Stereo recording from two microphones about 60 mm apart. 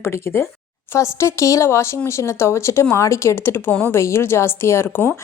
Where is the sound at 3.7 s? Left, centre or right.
Left.